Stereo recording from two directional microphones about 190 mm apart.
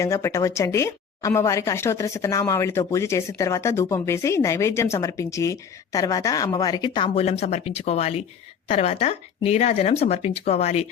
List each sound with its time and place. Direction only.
0.0 s speech: 15° left (ahead or behind); by 10.8 s 35° left (ahead or behind)